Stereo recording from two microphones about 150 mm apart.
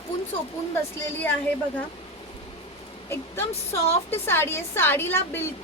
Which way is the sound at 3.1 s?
15° left (ahead or behind).